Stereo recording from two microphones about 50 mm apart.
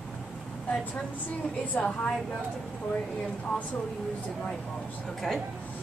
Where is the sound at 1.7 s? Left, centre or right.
Left.